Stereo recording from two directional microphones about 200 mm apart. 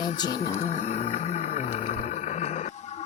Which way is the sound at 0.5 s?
35° left (ahead or behind).